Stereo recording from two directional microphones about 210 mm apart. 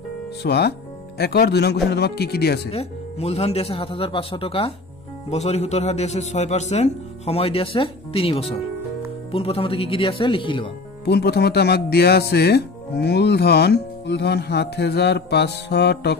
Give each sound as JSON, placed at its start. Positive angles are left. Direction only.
{"t": 0.4, "sound": "speech", "side_deg": 50}
{"t": 2.7, "sound": "a man's voice", "side_deg": 30}
{"t": 11.1, "sound": "speech", "side_deg": 50}